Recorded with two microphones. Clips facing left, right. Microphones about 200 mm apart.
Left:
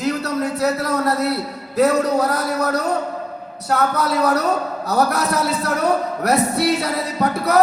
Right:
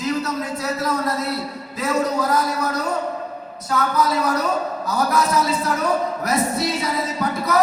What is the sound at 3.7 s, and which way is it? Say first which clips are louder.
Speech: left 1 dB; 65° left (ahead or behind).